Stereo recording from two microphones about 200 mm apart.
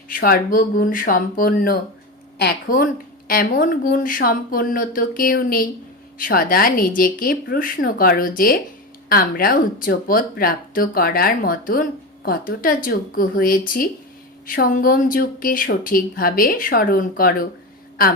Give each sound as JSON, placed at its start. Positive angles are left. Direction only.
{"t": 0.1, "sound": "speech", "side_deg": 45}